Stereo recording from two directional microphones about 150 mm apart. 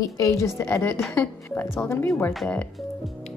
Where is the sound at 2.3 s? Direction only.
Centre (ahead or behind).